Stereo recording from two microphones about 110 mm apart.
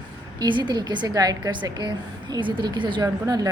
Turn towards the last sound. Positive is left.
turn(degrees=-35)  # may be behind; listen again after turning